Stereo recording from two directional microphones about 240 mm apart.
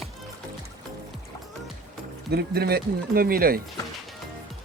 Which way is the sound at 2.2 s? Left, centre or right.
Right.